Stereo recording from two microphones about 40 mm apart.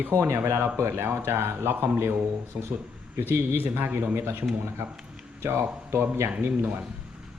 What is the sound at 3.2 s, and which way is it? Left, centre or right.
A man's voice, right.